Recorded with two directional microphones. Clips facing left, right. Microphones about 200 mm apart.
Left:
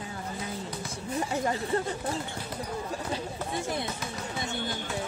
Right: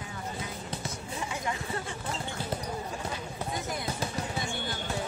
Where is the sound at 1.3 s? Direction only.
40° left (ahead or behind).